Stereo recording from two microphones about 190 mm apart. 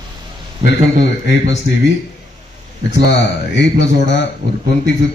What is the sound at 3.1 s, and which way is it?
A man's voice, 65° left (ahead or behind).